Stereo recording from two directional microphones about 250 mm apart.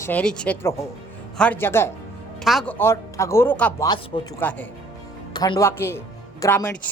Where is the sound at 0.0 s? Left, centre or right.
Centre.